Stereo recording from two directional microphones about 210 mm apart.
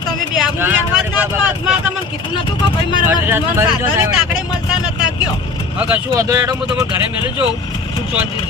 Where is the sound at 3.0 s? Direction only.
10° right (ahead or behind).